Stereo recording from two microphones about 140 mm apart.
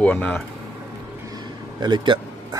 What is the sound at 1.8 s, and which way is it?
Speech, 30° right (ahead or behind).